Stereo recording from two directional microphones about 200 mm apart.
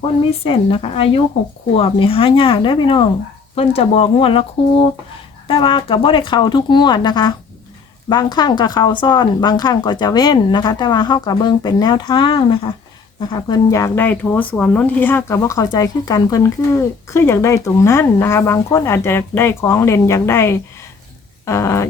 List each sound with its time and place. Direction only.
0.4 s speech: 30° left (ahead or behind)